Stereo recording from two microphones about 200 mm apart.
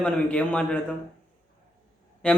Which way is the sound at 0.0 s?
5° left (ahead or behind).